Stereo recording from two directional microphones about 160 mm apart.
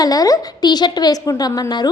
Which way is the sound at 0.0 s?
25° left (ahead or behind).